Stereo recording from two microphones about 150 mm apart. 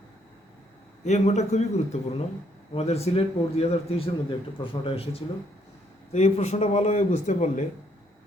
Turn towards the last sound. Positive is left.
turn(degrees=50)  # may be behind; listen again after turning